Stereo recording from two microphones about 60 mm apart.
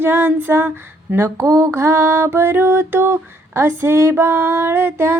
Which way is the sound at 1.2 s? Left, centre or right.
Right.